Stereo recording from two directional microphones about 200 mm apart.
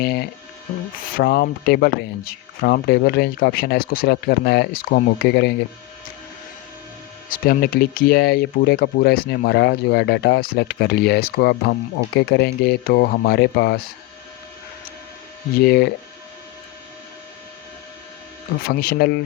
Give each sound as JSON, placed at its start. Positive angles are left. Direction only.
{"t": 0.0, "sound": "speech", "side_deg": 50}
{"t": 7.3, "sound": "speech", "side_deg": 45}
{"t": 15.5, "sound": "speech", "side_deg": 55}
{"t": 18.7, "sound": "speech", "side_deg": 50}